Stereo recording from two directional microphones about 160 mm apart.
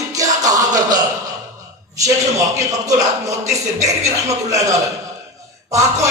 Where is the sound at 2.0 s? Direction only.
20° right (ahead or behind).